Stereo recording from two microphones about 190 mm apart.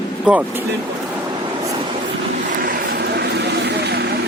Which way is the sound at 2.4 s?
45° right (ahead or behind).